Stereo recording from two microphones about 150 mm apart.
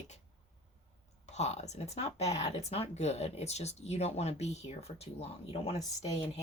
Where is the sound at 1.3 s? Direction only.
45° left (ahead or behind).